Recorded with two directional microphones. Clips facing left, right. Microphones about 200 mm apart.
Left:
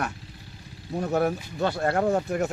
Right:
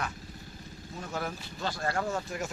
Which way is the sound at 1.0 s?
45° left (ahead or behind).